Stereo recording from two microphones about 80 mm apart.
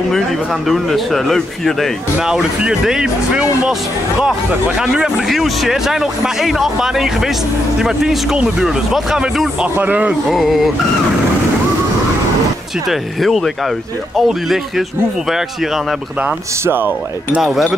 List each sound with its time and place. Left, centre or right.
0.1 s speech: centre
2.1 s speech: centre
9.8 s speech: right
10.3 s speech: centre
12.8 s speech: centre
16.6 s speech: right
17.4 s speech: centre